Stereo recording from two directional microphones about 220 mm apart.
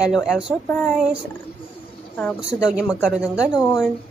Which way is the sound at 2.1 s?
Centre (ahead or behind).